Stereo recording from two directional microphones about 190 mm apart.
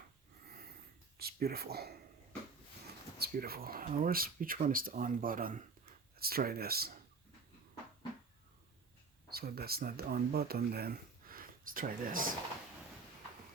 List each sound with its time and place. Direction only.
1.2 s speech: 55° right (ahead or behind)
3.2 s speech: 55° right (ahead or behind)
9.3 s speech: 55° right (ahead or behind)